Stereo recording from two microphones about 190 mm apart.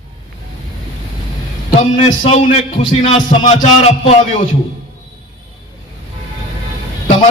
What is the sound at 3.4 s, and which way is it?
A man's voice, 35° left (ahead or behind).